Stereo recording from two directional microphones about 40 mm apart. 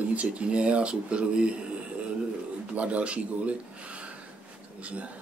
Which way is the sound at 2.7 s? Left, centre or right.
Right.